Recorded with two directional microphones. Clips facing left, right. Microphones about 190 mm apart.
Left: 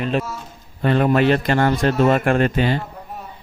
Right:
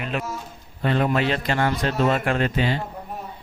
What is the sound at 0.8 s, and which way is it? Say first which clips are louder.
A man's voice: left 5 dB; 50° left (ahead or behind).